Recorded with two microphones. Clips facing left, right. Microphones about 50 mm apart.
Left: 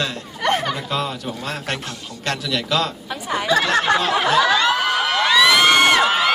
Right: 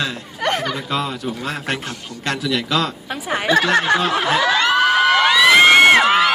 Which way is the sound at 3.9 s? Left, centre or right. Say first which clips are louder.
Even; centre.